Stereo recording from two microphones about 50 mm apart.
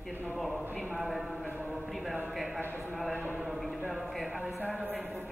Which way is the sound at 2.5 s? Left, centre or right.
Right.